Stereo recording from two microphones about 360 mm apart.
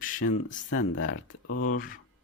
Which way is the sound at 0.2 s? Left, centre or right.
Left.